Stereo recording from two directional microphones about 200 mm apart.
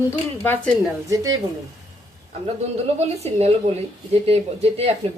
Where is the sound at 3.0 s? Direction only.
30° right (ahead or behind).